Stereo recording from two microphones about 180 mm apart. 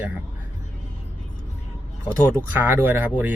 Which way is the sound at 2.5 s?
10° right (ahead or behind).